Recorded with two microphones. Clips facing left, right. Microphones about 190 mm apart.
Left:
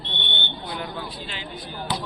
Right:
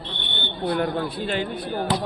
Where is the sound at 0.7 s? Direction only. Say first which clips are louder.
Right 11 dB; 55° right (ahead or behind).